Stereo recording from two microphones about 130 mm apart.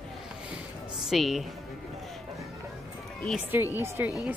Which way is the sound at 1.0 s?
Centre (ahead or behind).